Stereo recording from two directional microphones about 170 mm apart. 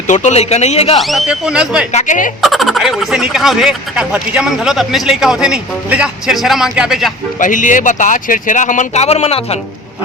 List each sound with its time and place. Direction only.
0.1 s speech: 45° left (ahead or behind)
0.9 s speech: centre (ahead or behind)
1.9 s speech: 45° left (ahead or behind)
2.4 s speech: centre (ahead or behind)
7.3 s speech: 50° left (ahead or behind)